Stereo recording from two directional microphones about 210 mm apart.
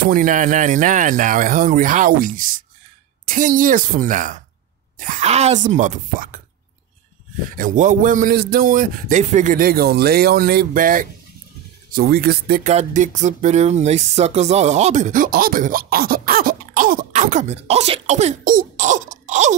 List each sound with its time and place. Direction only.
0.0 s speech: 40° right (ahead or behind)
7.4 s speech: 40° right (ahead or behind)
12.6 s speech: 35° right (ahead or behind)